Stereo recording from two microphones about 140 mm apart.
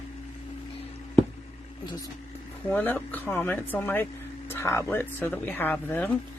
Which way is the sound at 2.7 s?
15° left (ahead or behind).